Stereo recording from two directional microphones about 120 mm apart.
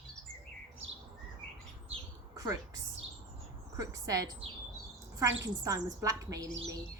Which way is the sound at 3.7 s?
30° right (ahead or behind).